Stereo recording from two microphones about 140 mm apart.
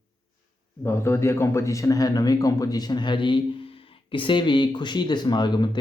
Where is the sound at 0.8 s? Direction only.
20° left (ahead or behind).